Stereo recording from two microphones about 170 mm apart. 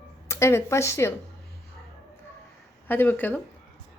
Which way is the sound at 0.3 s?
15° left (ahead or behind).